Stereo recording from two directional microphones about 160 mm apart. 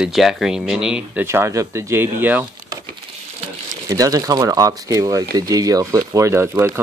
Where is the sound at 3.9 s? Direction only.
20° right (ahead or behind).